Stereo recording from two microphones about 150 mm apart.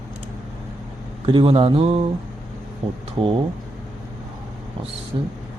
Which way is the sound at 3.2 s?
40° right (ahead or behind).